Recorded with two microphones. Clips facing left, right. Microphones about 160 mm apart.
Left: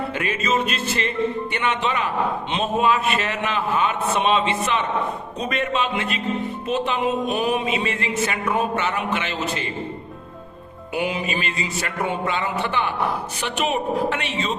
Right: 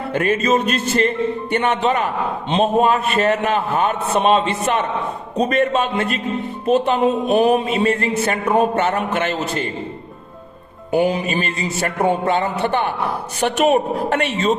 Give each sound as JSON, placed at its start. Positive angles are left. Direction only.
{"t": 0.1, "sound": "a man's voice", "side_deg": -45}
{"t": 6.7, "sound": "music", "side_deg": -40}
{"t": 7.6, "sound": "a man's voice", "side_deg": -45}
{"t": 10.9, "sound": "a man's voice", "side_deg": -40}